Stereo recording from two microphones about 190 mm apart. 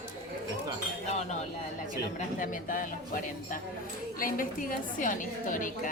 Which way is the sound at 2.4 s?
45° left (ahead or behind).